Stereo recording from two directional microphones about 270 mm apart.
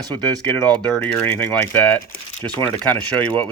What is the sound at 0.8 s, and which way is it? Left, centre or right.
Speech, centre.